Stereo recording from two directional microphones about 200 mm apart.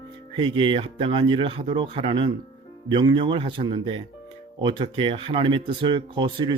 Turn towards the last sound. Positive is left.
turn(degrees=-25)  # may be behind; listen again after turning